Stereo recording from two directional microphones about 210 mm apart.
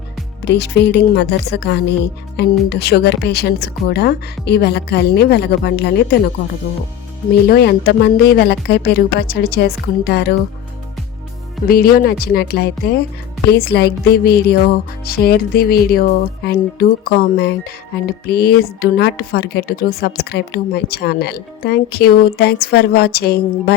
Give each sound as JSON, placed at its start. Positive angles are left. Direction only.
{"t": 0.4, "sound": "a woman's voice", "side_deg": 55}
{"t": 7.4, "sound": "a woman's voice", "side_deg": 50}
{"t": 11.7, "sound": "a woman's voice", "side_deg": 45}